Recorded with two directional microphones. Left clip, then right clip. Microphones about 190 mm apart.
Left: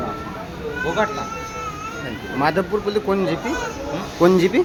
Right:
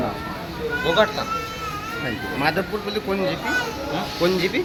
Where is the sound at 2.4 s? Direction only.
30° left (ahead or behind).